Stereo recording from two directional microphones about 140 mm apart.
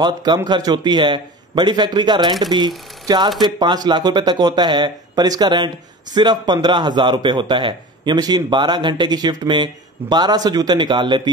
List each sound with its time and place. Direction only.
0.0 s a man's voice: 30° right (ahead or behind)